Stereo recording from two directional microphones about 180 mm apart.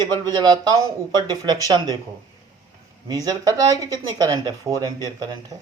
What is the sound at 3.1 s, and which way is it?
Speech, 20° right (ahead or behind).